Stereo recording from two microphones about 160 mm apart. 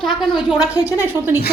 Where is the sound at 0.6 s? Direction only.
20° left (ahead or behind).